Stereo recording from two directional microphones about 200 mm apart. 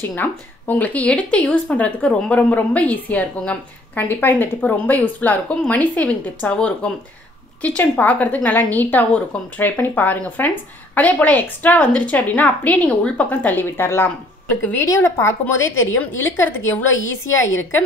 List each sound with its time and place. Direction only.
0.0 s a woman's voice: 10° left (ahead or behind)
16.9 s a woman's voice: 75° left (ahead or behind)